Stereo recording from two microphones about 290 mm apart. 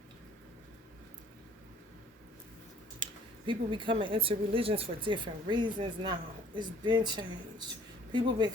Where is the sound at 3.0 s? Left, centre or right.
Centre.